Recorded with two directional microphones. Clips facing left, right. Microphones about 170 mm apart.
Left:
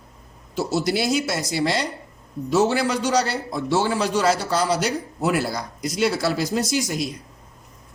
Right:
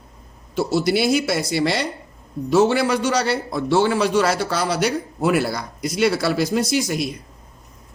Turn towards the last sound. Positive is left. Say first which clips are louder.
# right 3 dB
turn(degrees=-65)  # may be behind; listen again after turning